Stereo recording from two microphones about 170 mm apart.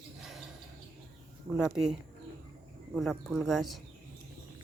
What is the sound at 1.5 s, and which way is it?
Speech, 5° right (ahead or behind).